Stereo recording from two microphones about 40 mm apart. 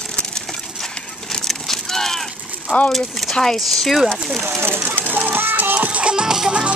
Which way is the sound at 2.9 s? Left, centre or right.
Centre.